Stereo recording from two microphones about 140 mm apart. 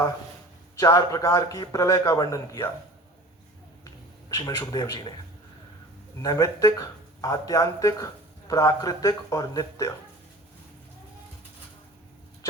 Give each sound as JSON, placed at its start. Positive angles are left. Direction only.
{"t": 0.8, "sound": "speech", "side_deg": 25}
{"t": 4.3, "sound": "speech", "side_deg": 25}
{"t": 6.2, "sound": "speech", "side_deg": 25}